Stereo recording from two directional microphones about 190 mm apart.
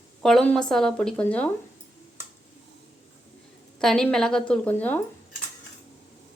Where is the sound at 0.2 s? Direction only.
Centre (ahead or behind).